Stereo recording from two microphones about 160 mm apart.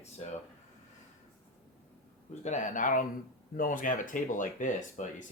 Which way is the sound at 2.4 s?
50° left (ahead or behind).